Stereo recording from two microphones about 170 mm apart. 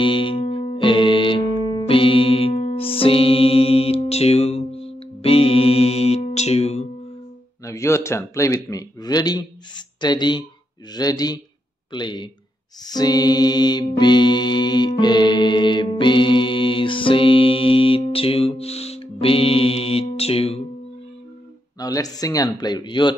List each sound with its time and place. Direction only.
0.0 s music: 30° left (ahead or behind)
7.6 s a man's voice: 15° left (ahead or behind)
12.8 s music: 25° left (ahead or behind)
21.7 s a man's voice: 20° left (ahead or behind)